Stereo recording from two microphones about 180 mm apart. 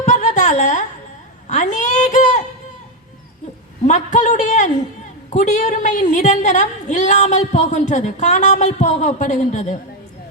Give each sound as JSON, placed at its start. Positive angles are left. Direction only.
{"t": 0.0, "sound": "a sound", "side_deg": 40}
{"t": 1.5, "sound": "a woman's voice", "side_deg": 40}
{"t": 3.8, "sound": "a woman's voice", "side_deg": 40}